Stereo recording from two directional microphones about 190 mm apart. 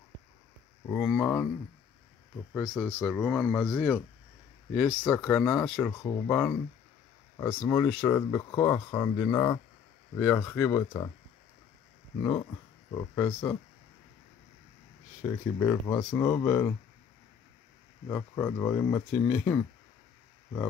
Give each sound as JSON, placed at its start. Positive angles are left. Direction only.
{"t": 0.8, "sound": "speech", "side_deg": 5}
{"t": 2.5, "sound": "speech", "side_deg": 0}
{"t": 12.2, "sound": "speech", "side_deg": 15}
{"t": 15.2, "sound": "speech", "side_deg": 15}
{"t": 18.0, "sound": "speech", "side_deg": 10}